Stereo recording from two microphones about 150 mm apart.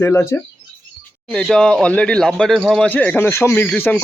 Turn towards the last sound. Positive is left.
turn(degrees=10)  # may be behind; listen again after turning